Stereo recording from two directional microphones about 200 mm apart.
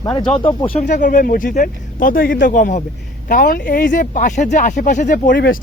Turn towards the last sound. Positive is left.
turn(degrees=45)  # may be behind; listen again after turning